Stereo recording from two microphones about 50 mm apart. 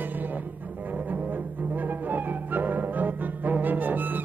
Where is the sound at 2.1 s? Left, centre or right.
Right.